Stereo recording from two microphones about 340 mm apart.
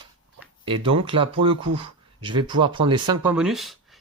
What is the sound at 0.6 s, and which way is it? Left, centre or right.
Speech, centre.